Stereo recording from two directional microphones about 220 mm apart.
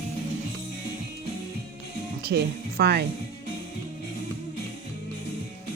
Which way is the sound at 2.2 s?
45° right (ahead or behind).